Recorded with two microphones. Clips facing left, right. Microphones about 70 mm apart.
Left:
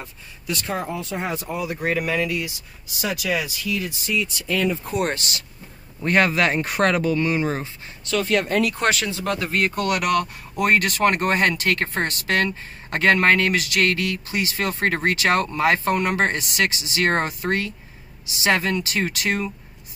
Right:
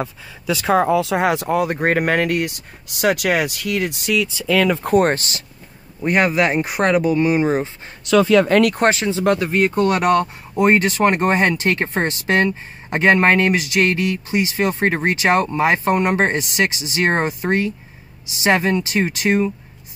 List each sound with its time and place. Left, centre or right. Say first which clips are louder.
0.9 s speech: right 10 dB; right
4.9 s speech: right 8 dB; right
5.9 s speech: right 2 dB; centre
8.5 s speech: right 7 dB; right
8.8 s speech: right 6 dB; right
9.4 s speech: right 5 dB; centre
9.8 s speech: right 6 dB; right